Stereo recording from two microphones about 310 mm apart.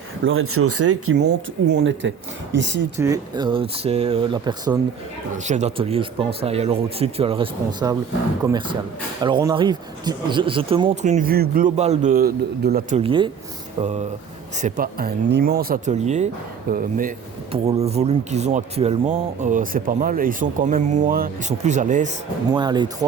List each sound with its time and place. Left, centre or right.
0.3 s speech: right
1.1 s speech: right
3.0 s speech: centre; by 13.0 s right
13.0 s speech: centre
14.6 s speech: right
22.5 s speech: centre